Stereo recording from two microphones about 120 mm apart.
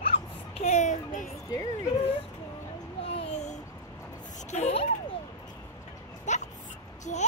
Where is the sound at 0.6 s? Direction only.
75° left (ahead or behind); by 1.3 s 90° left.